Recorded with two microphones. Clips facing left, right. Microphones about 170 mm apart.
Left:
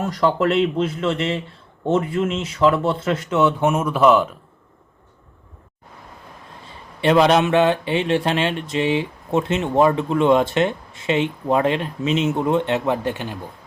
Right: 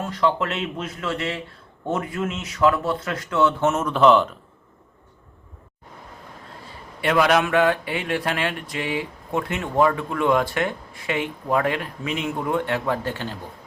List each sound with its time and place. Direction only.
0.1 s speech: 40° left (ahead or behind); by 4.3 s 5° left (ahead or behind)
7.0 s speech: 25° left (ahead or behind)